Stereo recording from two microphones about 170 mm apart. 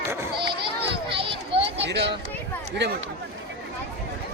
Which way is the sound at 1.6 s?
85° right.